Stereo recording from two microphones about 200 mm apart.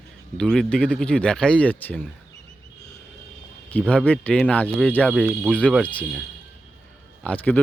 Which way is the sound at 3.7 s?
5° left (ahead or behind).